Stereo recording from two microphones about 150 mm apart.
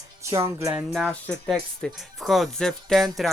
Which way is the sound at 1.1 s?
5° left (ahead or behind).